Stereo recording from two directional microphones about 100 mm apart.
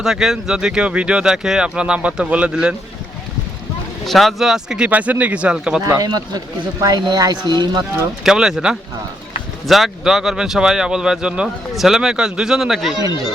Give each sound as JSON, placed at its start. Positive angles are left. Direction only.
{"t": 0.0, "sound": "speech", "side_deg": -5}
{"t": 4.0, "sound": "speech", "side_deg": 0}
{"t": 5.8, "sound": "speech", "side_deg": -40}
{"t": 8.2, "sound": "speech", "side_deg": -5}